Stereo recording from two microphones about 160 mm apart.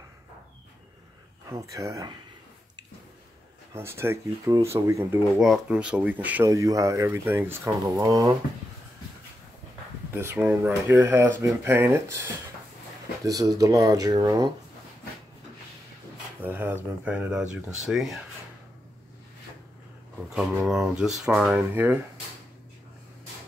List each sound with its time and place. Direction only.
1.5 s speech: 20° right (ahead or behind)
3.7 s speech: 15° right (ahead or behind)
5.4 s speech: 5° right (ahead or behind)
6.5 s speech: 20° right (ahead or behind)
10.1 s speech: 15° right (ahead or behind)
13.2 s speech: 20° right (ahead or behind)
16.3 s speech: 10° right (ahead or behind)
20.2 s speech: centre (ahead or behind)